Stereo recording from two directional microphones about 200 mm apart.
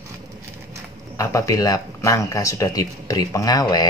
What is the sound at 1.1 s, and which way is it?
Speech, 15° left (ahead or behind).